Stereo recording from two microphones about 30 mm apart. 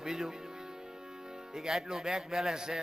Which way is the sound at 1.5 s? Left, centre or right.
Right.